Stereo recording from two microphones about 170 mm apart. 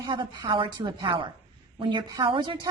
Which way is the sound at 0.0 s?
25° right (ahead or behind).